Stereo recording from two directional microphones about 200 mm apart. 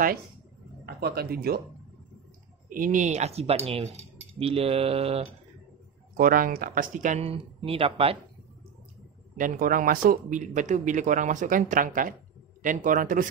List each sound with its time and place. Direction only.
0.8 s speech: 50° right (ahead or behind)
2.7 s speech: 40° right (ahead or behind)
6.1 s speech: 45° right (ahead or behind); by 8.2 s 30° right (ahead or behind)
9.4 s speech: 40° right (ahead or behind)